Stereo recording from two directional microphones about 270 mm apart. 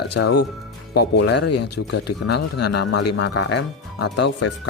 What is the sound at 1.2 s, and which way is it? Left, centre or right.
Speech, left.